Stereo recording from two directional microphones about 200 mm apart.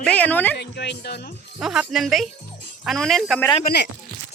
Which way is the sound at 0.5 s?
55° left (ahead or behind).